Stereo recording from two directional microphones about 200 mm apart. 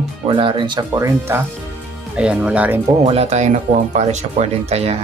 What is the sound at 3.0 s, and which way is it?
Speech, 30° right (ahead or behind).